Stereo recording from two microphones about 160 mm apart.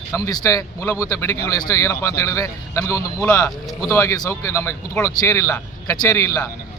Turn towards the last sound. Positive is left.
turn(degrees=20)  # may be behind; listen again after turning